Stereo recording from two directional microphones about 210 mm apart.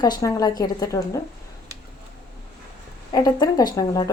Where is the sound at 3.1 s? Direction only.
20° left (ahead or behind).